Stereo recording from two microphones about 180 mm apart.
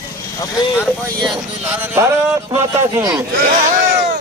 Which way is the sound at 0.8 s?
5° left (ahead or behind).